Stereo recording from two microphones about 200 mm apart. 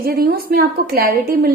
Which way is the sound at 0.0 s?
50° right (ahead or behind).